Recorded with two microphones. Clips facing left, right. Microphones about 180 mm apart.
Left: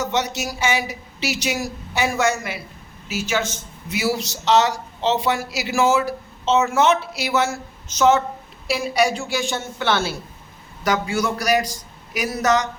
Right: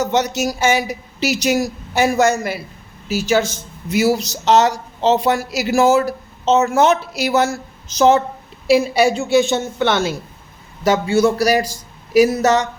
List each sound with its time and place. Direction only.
0.0 s a man's voice: 40° right (ahead or behind)